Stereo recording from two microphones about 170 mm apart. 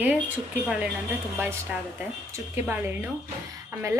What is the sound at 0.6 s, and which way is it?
A woman's voice, 5° right (ahead or behind).